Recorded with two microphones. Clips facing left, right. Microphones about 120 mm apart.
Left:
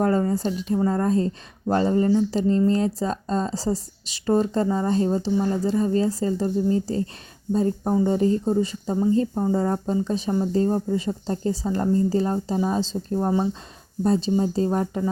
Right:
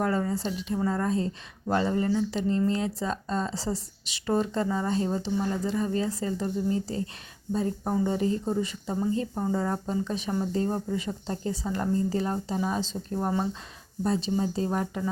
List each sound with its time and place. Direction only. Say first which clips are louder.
0.0 s a woman's voice: left 6 dB; 40° left (ahead or behind)
13.2 s speech: left 5 dB; 20° left (ahead or behind)
14.0 s speech: left 6 dB; 35° left (ahead or behind)